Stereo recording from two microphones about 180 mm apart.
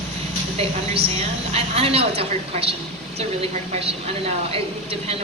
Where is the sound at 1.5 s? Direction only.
35° right (ahead or behind).